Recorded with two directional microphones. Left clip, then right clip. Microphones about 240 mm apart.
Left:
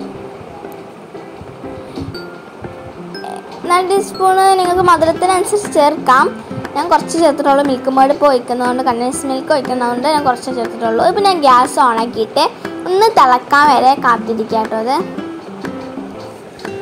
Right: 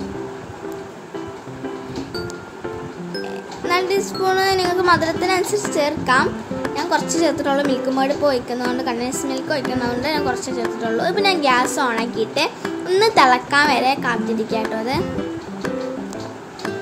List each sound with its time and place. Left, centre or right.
3.6 s child singing: centre
4.7 s speech: centre